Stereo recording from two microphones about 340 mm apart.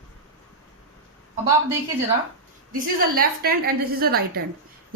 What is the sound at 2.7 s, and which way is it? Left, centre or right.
A woman's voice, right.